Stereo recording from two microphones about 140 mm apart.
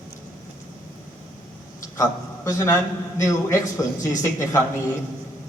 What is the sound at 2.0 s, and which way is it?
A man's voice, 20° left (ahead or behind).